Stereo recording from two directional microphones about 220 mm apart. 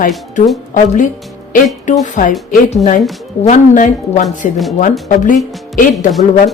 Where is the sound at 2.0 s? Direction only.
35° left (ahead or behind).